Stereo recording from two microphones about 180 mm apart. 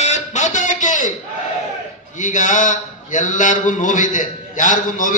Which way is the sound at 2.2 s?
45° left (ahead or behind).